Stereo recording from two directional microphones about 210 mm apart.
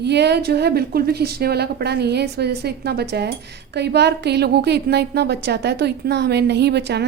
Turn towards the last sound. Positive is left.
turn(degrees=-55)  # may be behind; listen again after turning